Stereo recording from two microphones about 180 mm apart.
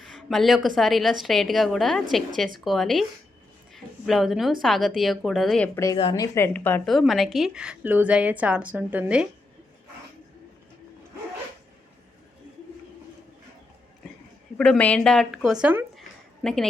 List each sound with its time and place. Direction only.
0.0 s a woman's voice: centre (ahead or behind)
6.0 s a woman's voice: 30° left (ahead or behind)
6.2 s a woman's voice: 15° left (ahead or behind)
6.8 s a woman's voice: centre (ahead or behind)
14.6 s speech: 5° left (ahead or behind)